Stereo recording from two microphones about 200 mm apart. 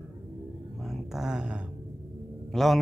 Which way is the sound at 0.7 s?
Centre (ahead or behind).